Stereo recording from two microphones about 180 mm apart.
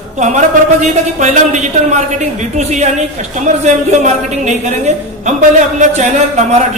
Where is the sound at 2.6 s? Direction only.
40° right (ahead or behind).